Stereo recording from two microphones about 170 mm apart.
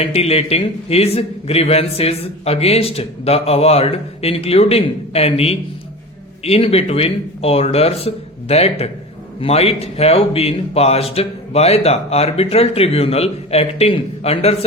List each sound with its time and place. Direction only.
0.0 s a man's voice: 35° left (ahead or behind)